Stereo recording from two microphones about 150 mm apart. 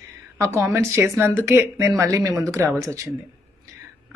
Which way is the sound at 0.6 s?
15° right (ahead or behind).